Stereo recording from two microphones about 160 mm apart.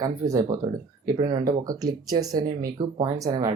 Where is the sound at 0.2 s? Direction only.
25° right (ahead or behind).